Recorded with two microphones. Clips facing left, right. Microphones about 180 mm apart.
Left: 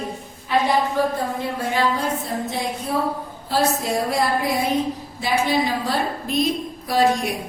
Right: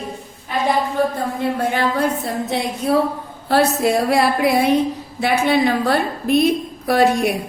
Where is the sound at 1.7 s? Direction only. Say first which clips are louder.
Right 3 dB; 65° right (ahead or behind).